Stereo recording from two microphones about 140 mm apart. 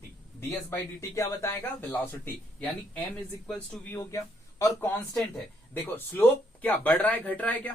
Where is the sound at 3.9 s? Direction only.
20° left (ahead or behind).